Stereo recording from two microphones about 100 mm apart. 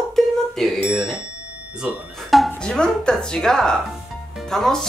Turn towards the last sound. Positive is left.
turn(degrees=5)  # may be behind; listen again after turning